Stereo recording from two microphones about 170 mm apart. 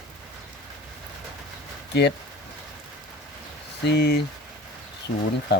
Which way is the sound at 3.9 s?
75° left (ahead or behind).